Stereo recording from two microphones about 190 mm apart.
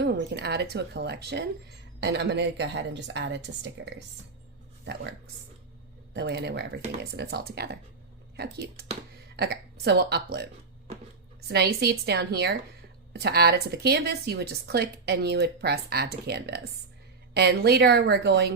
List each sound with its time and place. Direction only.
0.0 s a woman's voice: 65° right (ahead or behind)
6.1 s speech: 60° right (ahead or behind)